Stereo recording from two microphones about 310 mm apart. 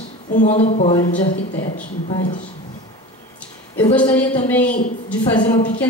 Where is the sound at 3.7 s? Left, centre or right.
Centre.